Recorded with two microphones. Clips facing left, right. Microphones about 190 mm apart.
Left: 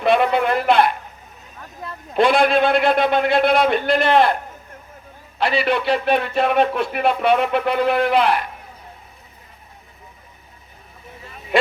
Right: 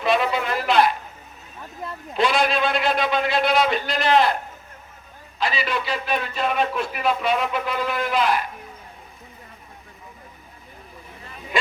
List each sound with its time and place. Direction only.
0.0 s a sound: 55° left (ahead or behind)
2.1 s speech: 55° left (ahead or behind)
5.4 s speech: 60° left (ahead or behind)
11.5 s speech: 60° left (ahead or behind)